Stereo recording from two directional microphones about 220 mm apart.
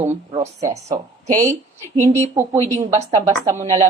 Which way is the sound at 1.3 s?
15° right (ahead or behind).